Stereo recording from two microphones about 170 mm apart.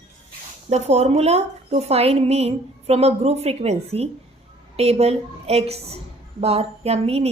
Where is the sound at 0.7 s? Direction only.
40° right (ahead or behind).